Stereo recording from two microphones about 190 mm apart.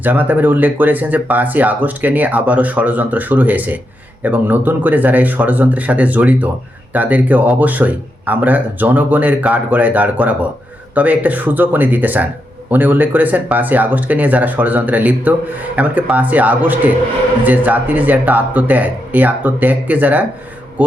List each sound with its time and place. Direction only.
0.0 s speech: 10° right (ahead or behind)